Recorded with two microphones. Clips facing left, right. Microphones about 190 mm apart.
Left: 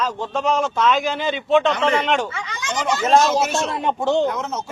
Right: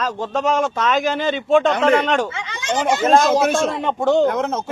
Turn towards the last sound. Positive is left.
turn(degrees=-55)  # may be behind; listen again after turning